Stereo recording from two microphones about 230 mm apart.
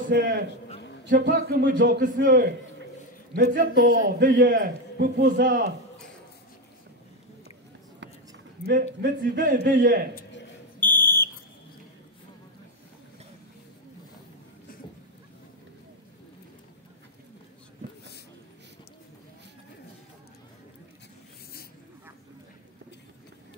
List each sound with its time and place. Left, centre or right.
0.1 s a man's voice: right
8.6 s a man's voice: right
10.8 s fire alarm: centre